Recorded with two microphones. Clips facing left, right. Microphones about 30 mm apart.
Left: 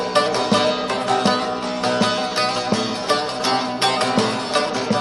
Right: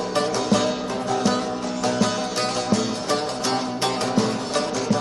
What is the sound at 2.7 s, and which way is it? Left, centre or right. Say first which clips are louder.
Music: left 2 dB; left.